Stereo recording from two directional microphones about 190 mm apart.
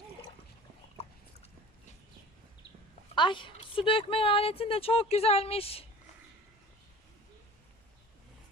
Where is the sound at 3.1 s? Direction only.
25° left (ahead or behind).